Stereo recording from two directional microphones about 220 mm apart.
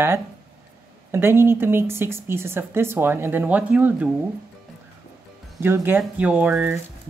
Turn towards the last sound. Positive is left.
turn(degrees=-10)  # may be behind; listen again after turning